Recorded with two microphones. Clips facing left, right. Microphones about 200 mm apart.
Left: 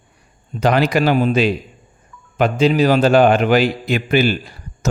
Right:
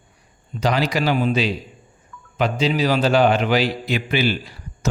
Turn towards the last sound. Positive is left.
turn(degrees=50)  # may be behind; listen again after turning